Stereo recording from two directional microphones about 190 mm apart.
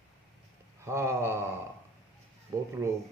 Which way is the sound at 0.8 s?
15° right (ahead or behind).